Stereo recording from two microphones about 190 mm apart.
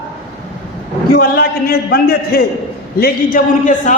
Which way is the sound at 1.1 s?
55° left (ahead or behind).